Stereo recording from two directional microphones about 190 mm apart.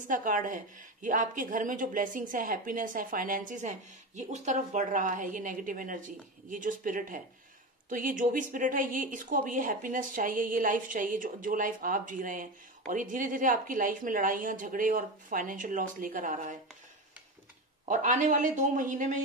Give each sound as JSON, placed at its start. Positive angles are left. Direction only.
{"t": 0.1, "sound": "speech", "side_deg": -45}
{"t": 17.8, "sound": "speech", "side_deg": -40}